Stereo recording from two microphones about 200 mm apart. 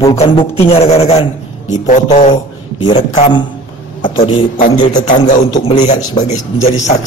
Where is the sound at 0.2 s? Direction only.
30° left (ahead or behind).